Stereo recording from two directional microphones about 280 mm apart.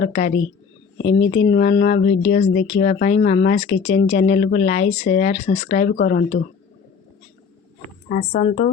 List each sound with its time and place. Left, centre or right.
0.0 s speech: left
8.1 s speech: left